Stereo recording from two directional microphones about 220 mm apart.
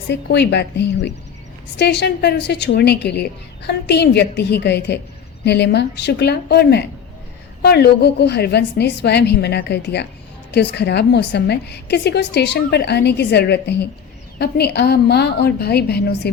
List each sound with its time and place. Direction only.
0.1 s a woman's voice: 50° left (ahead or behind)